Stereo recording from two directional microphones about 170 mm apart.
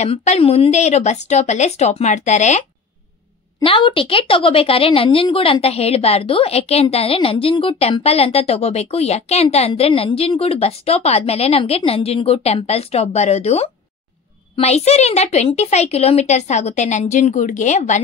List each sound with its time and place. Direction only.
0.0 s a woman's voice: 40° left (ahead or behind)
3.6 s a woman's voice: 30° left (ahead or behind)